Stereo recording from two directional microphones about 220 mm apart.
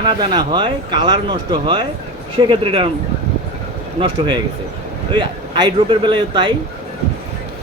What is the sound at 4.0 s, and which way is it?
Speech, 25° right (ahead or behind).